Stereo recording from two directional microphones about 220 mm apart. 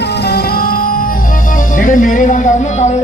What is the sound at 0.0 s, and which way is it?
Music, 50° left (ahead or behind).